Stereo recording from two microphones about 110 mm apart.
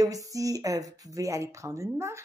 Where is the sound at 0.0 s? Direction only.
30° right (ahead or behind).